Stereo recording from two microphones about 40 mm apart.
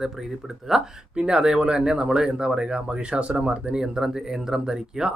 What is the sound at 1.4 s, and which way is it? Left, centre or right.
Speech, centre.